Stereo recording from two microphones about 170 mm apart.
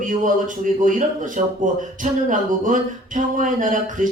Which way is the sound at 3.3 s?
50° right (ahead or behind).